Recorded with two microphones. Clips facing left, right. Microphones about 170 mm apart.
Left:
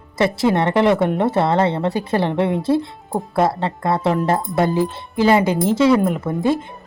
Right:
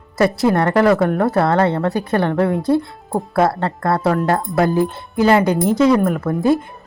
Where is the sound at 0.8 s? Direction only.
25° left (ahead or behind).